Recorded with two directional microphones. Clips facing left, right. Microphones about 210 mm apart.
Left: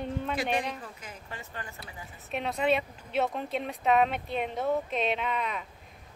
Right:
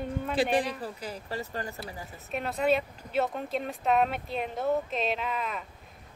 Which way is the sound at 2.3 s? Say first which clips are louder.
Right 1 dB; centre (ahead or behind).